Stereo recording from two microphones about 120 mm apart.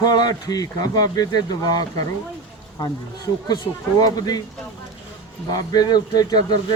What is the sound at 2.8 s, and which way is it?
Speech, 35° left (ahead or behind).